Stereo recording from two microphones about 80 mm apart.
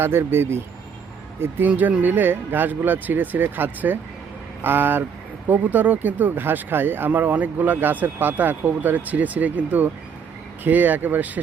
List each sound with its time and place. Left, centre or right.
0.0 s speech: right